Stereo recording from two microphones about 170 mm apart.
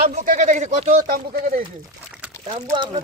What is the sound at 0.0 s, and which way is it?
Speech, 45° right (ahead or behind).